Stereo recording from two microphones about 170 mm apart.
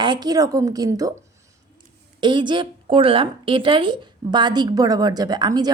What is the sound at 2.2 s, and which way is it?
A woman's voice, 30° right (ahead or behind).